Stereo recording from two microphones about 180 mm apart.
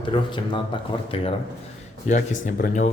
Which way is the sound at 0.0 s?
25° left (ahead or behind).